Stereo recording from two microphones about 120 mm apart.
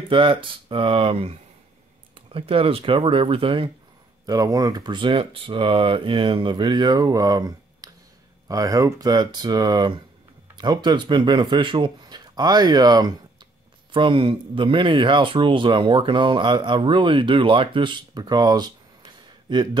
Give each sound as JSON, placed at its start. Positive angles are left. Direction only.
{"t": 0.1, "sound": "speech", "side_deg": -45}
{"t": 4.3, "sound": "speech", "side_deg": -30}
{"t": 13.9, "sound": "speech", "side_deg": -45}